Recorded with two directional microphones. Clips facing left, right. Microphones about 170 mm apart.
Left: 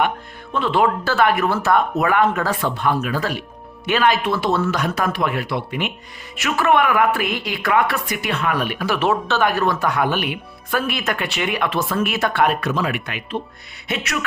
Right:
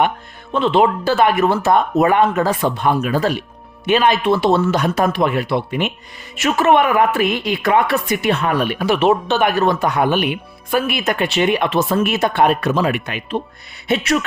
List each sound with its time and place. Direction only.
0.5 s speech: 20° right (ahead or behind)